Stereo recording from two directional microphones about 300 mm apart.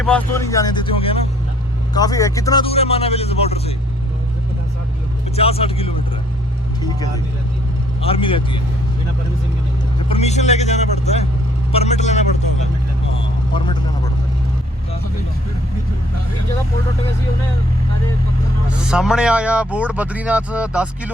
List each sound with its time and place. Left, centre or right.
0.0 s speech: centre
5.4 s speech: centre
8.0 s speech: centre
10.1 s speech: left
18.9 s speech: centre